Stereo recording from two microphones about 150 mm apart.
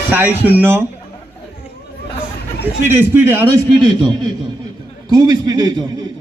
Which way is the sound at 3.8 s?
30° right (ahead or behind).